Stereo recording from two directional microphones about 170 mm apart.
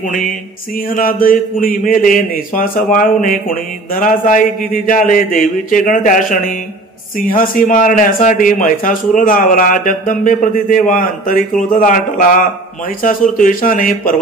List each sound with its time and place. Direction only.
0.1 s a man's voice: 50° left (ahead or behind)